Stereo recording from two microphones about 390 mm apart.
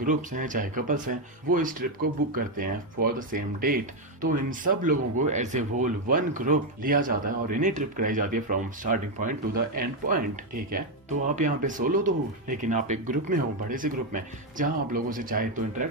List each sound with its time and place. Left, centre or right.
0.0 s speech: centre
11.3 s speech: centre